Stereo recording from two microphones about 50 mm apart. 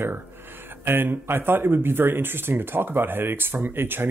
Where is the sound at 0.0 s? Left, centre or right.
Right.